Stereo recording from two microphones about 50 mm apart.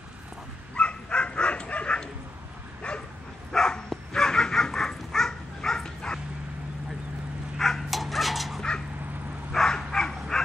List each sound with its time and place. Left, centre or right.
0.7 s dog: left
2.8 s bow-wow: left
3.5 s dog: centre
7.5 s dog: centre
9.5 s bow-wow: centre